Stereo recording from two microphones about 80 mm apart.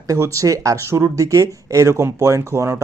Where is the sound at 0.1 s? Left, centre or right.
Right.